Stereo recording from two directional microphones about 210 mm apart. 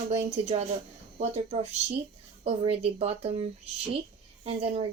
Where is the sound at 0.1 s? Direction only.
30° right (ahead or behind).